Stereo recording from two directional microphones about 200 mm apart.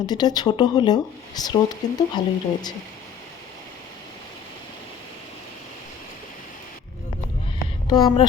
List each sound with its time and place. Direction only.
0.0 s speech: 20° left (ahead or behind)
7.9 s speech: 20° left (ahead or behind)